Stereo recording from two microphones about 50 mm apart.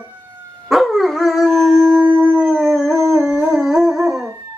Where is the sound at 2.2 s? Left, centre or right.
Centre.